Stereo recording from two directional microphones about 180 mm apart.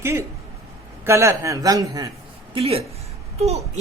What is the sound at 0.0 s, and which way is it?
Speech, 15° right (ahead or behind).